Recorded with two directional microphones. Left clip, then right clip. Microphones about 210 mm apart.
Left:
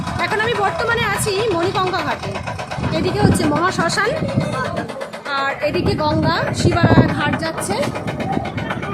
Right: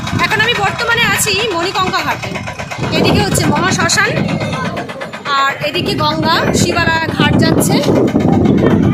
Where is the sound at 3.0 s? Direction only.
10° left (ahead or behind).